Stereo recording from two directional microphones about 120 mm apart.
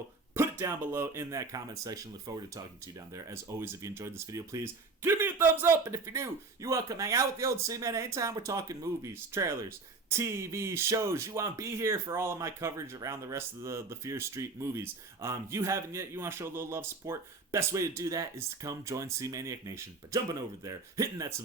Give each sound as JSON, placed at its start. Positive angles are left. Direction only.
{"t": 0.3, "sound": "speech", "side_deg": -20}